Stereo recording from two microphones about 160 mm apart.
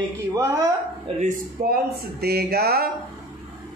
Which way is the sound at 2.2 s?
80° right.